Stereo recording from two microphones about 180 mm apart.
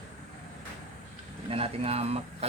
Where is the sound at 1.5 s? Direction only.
35° right (ahead or behind).